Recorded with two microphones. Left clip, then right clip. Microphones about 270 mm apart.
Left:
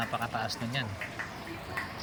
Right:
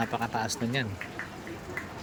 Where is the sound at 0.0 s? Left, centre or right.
Centre.